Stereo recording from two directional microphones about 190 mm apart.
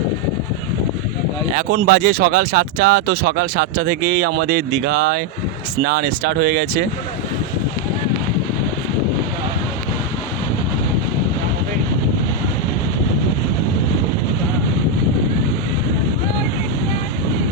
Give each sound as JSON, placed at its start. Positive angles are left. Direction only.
{"t": 1.7, "sound": "speech", "side_deg": -55}